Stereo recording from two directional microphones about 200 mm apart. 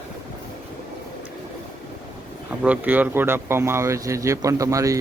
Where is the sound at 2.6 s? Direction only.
10° right (ahead or behind).